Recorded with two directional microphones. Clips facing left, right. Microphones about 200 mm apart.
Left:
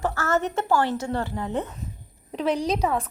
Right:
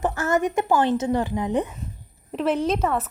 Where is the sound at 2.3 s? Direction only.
Centre (ahead or behind).